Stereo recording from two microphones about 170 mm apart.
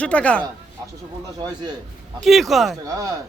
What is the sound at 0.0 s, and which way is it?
Speech, 5° left (ahead or behind).